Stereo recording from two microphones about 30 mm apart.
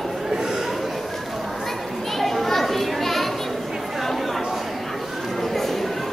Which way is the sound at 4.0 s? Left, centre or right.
Centre.